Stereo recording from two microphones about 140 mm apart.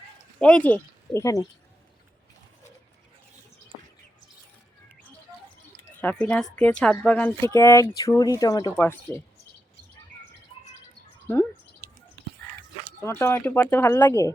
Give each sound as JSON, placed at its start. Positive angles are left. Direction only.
{"t": 0.3, "sound": "speech", "side_deg": 5}
{"t": 1.2, "sound": "speech", "side_deg": 25}
{"t": 6.0, "sound": "a woman's voice", "side_deg": 10}
{"t": 8.7, "sound": "a woman's voice", "side_deg": 15}
{"t": 13.0, "sound": "speech", "side_deg": 20}